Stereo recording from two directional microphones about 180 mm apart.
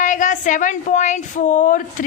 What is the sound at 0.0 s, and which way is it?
Speech, 45° left (ahead or behind).